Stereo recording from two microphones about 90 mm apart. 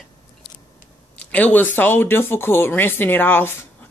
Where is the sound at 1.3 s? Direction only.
20° left (ahead or behind).